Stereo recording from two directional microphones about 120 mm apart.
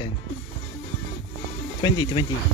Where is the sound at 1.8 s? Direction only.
40° left (ahead or behind).